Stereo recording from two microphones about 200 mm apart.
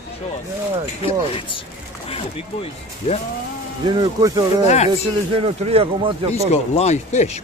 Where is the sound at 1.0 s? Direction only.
25° left (ahead or behind).